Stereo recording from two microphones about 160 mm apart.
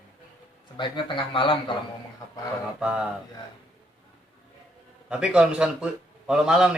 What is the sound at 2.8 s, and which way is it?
Speech, 5° right (ahead or behind).